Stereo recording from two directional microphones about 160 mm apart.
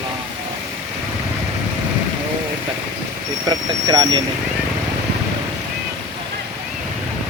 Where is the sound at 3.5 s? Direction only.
25° right (ahead or behind).